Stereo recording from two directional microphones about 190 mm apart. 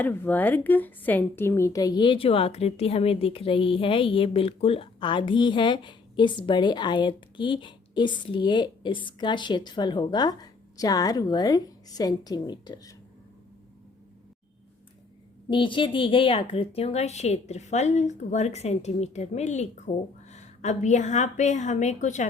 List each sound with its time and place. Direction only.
0.0 s a woman's voice: 10° left (ahead or behind)
15.4 s speech: 25° left (ahead or behind)